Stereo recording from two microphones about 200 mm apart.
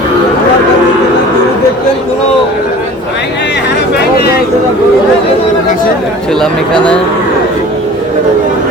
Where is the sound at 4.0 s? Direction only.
50° left (ahead or behind).